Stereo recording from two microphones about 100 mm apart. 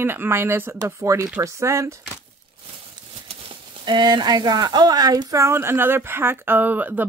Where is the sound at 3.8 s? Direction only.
50° right (ahead or behind).